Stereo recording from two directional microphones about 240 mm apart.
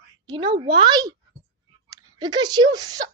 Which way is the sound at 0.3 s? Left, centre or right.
Centre.